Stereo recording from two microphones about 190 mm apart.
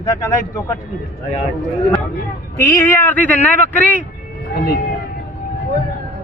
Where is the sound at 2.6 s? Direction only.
15° left (ahead or behind).